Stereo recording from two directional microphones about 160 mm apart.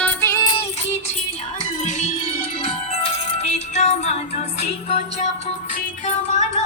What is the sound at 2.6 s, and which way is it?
Music, 40° left (ahead or behind).